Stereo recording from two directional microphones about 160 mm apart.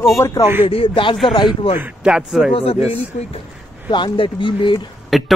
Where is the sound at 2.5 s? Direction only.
35° left (ahead or behind).